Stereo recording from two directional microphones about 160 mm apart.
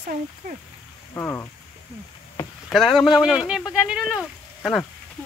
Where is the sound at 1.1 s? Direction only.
15° left (ahead or behind).